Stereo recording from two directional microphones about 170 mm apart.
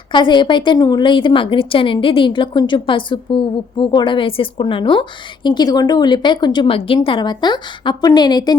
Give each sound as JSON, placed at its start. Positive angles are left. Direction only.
{"t": 0.1, "sound": "a woman's voice", "side_deg": 30}